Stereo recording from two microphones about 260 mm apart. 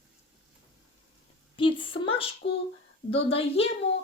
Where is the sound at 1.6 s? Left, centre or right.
Centre.